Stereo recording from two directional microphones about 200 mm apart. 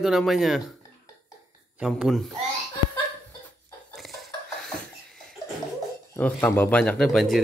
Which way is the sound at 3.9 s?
Centre (ahead or behind).